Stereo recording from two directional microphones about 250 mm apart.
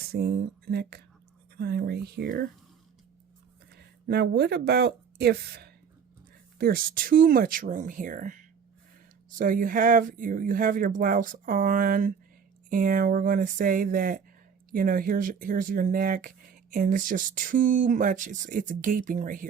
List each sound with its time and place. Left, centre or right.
0.1 s speech: right
3.8 s speech: right